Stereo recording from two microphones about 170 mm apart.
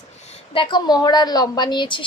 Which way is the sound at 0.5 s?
25° left (ahead or behind).